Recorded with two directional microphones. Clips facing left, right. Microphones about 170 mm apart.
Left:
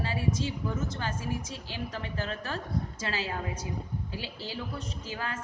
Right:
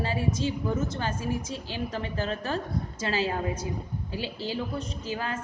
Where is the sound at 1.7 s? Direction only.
25° right (ahead or behind).